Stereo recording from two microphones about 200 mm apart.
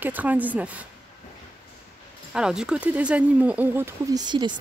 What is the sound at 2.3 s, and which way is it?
Speech, 5° right (ahead or behind).